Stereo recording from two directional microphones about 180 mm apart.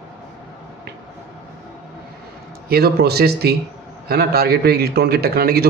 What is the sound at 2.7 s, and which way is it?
A man's voice, 60° right (ahead or behind).